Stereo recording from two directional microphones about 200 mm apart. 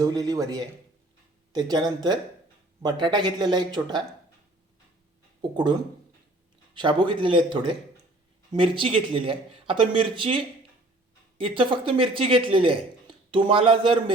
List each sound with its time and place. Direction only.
0.0 s a man's voice: 20° right (ahead or behind)
5.4 s speech: 20° right (ahead or behind)
6.7 s speech: 25° right (ahead or behind)